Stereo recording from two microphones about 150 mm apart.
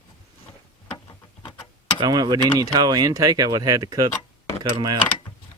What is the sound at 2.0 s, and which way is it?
Speech, 25° right (ahead or behind).